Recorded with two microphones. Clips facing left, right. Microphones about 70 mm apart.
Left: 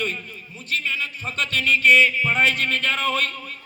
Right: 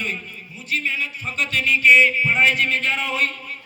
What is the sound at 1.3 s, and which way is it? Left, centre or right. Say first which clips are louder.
Music: right 2 dB; left.